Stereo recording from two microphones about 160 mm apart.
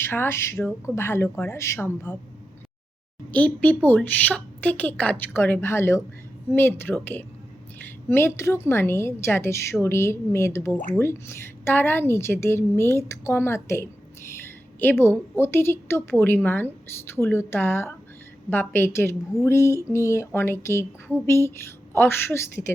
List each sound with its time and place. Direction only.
0.0 s a woman's voice: 15° left (ahead or behind)
3.3 s a woman's voice: 10° left (ahead or behind)